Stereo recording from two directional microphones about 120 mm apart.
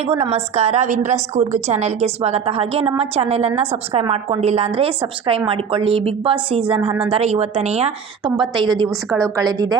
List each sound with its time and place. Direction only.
0.1 s a woman's voice: 55° right (ahead or behind)
7.1 s a woman's voice: 60° right (ahead or behind)
8.2 s a woman's voice: 40° right (ahead or behind)
9.0 s a woman's voice: 10° left (ahead or behind)
9.3 s a woman's voice: 30° right (ahead or behind)